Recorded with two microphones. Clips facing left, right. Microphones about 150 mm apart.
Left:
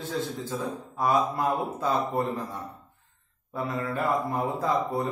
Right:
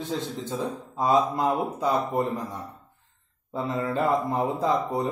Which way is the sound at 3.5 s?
20° right (ahead or behind).